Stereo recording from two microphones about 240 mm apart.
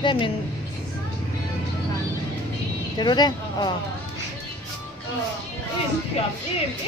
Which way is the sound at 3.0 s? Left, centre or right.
Centre.